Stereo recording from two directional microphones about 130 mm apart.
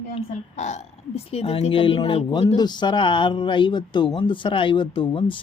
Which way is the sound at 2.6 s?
35° left (ahead or behind).